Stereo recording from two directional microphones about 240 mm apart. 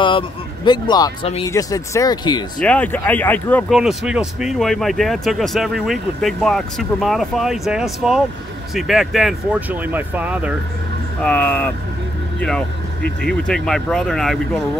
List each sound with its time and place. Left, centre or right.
0.7 s speech: centre
2.6 s speech: centre
11.2 s speech: centre